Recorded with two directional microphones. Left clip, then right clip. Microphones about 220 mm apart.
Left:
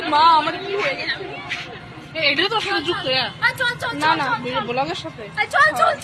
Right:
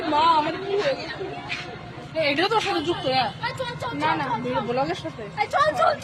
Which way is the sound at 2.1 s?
35° right (ahead or behind).